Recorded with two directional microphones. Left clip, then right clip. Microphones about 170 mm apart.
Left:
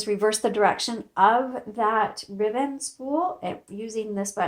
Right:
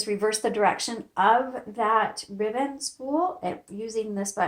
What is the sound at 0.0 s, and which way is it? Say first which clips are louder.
Speech: left 2 dB; 45° left (ahead or behind).